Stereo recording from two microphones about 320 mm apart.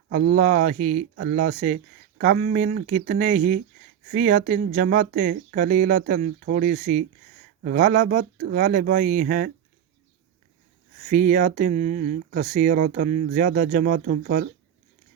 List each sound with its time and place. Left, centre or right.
0.1 s speech: right
11.1 s speech: right